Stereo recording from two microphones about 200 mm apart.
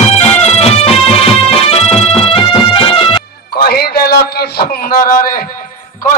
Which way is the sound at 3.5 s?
50° left (ahead or behind).